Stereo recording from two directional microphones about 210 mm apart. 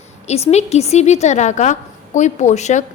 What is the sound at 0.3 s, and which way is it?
A woman's voice, 30° left (ahead or behind).